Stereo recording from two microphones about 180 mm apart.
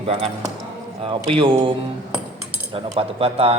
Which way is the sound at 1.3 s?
30° right (ahead or behind).